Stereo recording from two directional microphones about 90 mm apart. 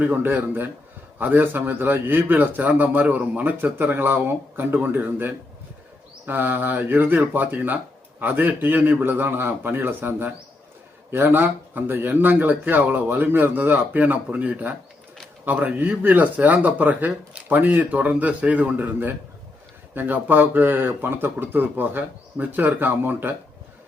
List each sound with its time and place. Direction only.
0.0 s a man's voice: 20° right (ahead or behind)